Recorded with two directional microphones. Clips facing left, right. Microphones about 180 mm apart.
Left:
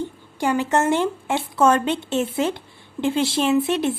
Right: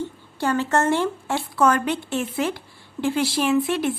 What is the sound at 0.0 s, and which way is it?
Speech, 15° left (ahead or behind).